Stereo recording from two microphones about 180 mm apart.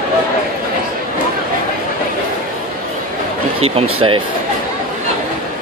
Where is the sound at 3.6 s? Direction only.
30° right (ahead or behind).